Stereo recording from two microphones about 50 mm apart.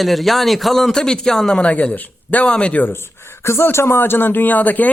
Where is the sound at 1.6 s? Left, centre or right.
Left.